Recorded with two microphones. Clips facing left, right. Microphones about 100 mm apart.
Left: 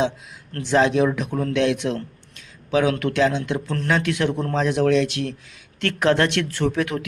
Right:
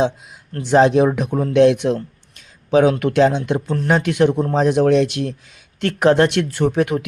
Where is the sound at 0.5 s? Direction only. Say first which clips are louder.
Right 5 dB; 15° right (ahead or behind).